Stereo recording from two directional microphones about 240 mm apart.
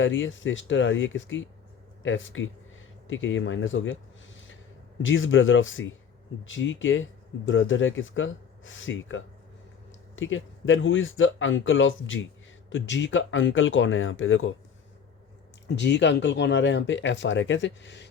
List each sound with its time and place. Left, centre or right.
0.0 s speech: left
5.0 s speech: left
15.6 s speech: left